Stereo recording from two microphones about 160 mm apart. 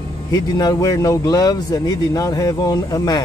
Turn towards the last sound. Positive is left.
turn(degrees=25)  # may be behind; listen again after turning